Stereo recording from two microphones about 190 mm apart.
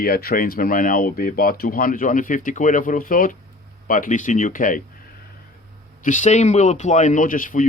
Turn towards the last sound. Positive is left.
turn(degrees=45)  # may be behind; listen again after turning